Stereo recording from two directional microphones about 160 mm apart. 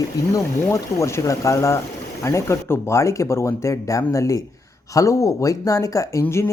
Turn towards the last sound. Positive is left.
turn(degrees=15)  # may be behind; listen again after turning